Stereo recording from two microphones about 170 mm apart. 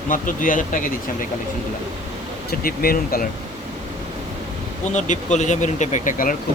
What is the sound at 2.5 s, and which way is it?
Speech, 60° left (ahead or behind).